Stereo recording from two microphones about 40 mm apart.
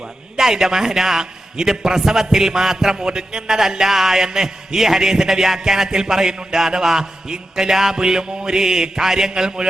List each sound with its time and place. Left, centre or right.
0.3 s a man's voice: centre